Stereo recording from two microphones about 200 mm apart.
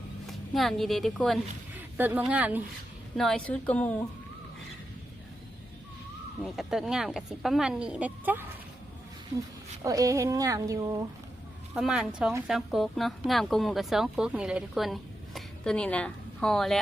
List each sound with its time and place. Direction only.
0.3 s a woman's voice: centre (ahead or behind)
3.2 s speech: 5° left (ahead or behind)
6.4 s a woman's voice: centre (ahead or behind)
9.8 s speech: 15° right (ahead or behind)
11.7 s a woman's voice: centre (ahead or behind)